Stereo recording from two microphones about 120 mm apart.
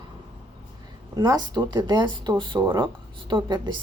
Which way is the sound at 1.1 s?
30° right (ahead or behind).